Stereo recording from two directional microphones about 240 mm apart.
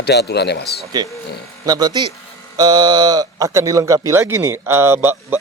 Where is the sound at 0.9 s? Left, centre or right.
Centre.